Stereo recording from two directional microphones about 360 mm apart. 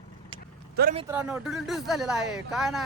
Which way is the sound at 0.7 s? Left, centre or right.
Right.